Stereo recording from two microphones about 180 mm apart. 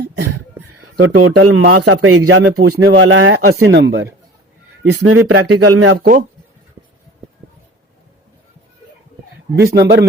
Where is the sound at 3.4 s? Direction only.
70° right (ahead or behind).